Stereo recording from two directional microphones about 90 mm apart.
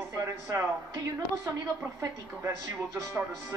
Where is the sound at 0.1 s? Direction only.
40° right (ahead or behind).